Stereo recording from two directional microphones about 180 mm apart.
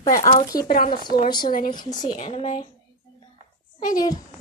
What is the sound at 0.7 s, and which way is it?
A woman's voice, 55° left (ahead or behind).